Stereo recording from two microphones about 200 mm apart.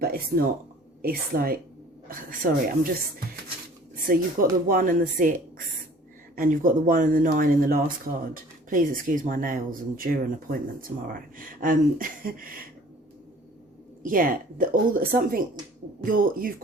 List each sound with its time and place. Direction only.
0.0 s speech: 45° right (ahead or behind)
14.0 s speech: 45° right (ahead or behind)